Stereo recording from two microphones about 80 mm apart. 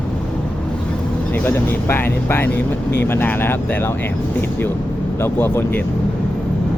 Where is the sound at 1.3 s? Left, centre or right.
Left.